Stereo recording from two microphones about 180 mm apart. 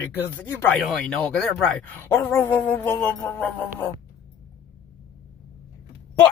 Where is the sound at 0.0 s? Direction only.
10° left (ahead or behind).